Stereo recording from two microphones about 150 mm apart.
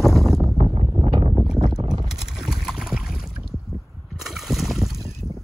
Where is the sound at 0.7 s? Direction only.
40° right (ahead or behind).